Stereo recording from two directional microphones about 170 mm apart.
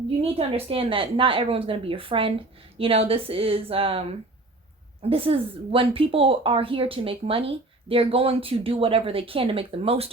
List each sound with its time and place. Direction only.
0.3 s speech: 35° right (ahead or behind)
5.0 s speech: 35° right (ahead or behind)